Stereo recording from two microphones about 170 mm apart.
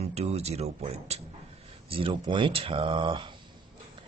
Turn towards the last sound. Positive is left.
turn(degrees=-30)  # may be behind; listen again after turning